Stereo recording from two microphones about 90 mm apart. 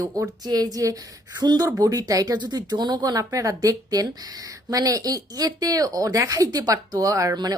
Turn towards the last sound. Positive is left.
turn(degrees=-40)  # may be behind; listen again after turning